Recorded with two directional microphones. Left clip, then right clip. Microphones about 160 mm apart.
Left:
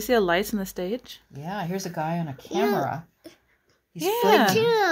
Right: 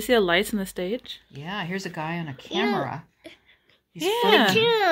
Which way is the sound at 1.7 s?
40° left (ahead or behind).